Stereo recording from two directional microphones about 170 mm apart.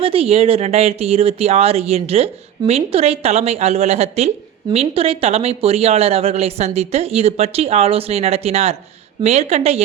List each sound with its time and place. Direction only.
0.0 s speech: 35° right (ahead or behind)